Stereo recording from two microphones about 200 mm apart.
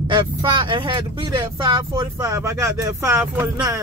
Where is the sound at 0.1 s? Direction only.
25° right (ahead or behind).